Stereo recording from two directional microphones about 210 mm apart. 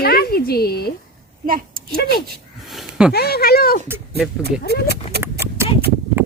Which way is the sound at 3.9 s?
10° right (ahead or behind).